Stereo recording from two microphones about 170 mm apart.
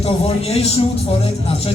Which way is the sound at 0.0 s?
35° left (ahead or behind).